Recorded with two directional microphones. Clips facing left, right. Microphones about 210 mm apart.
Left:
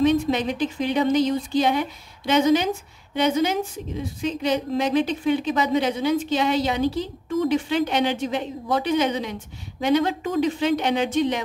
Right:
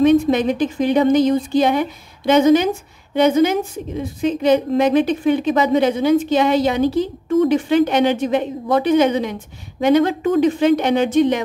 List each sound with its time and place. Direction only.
0.0 s a woman's voice: 50° right (ahead or behind)